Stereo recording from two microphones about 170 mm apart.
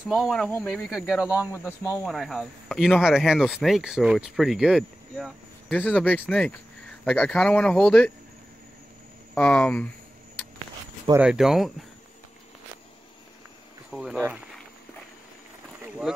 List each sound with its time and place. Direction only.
0.0 s speech: centre (ahead or behind)
1.5 s speech: 15° left (ahead or behind)
2.0 s speech: centre (ahead or behind)
9.3 s speech: 10° left (ahead or behind)
11.1 s speech: 5° right (ahead or behind)
13.9 s speech: 5° right (ahead or behind)
15.8 s a sound: 5° right (ahead or behind)